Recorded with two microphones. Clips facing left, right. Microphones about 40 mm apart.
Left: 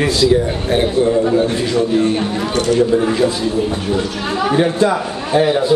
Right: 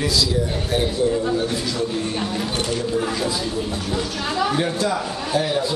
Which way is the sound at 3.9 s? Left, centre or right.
Centre.